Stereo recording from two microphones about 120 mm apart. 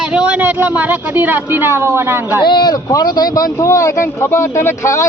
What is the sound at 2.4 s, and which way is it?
Speech, 40° left (ahead or behind).